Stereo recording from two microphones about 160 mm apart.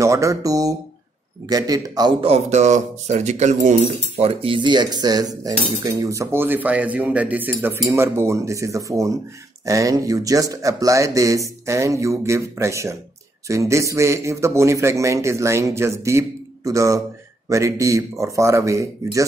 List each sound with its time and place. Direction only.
0.0 s speech: 20° right (ahead or behind)
2.3 s a man's voice: 45° right (ahead or behind); by 19.2 s 20° right (ahead or behind)